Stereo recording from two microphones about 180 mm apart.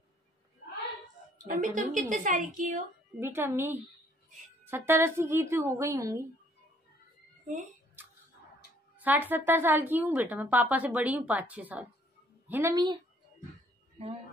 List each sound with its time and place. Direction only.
1.5 s a woman's voice: 50° right (ahead or behind)
3.2 s speech: 15° right (ahead or behind)
8.9 s speech: 10° right (ahead or behind)
14.0 s speech: 35° right (ahead or behind)